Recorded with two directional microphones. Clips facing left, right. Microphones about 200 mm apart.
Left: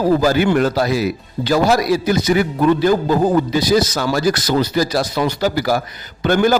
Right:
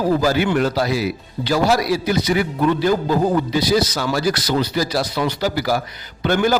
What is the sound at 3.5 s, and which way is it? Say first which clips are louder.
A man's voice: left 2 dB; 45° left (ahead or behind).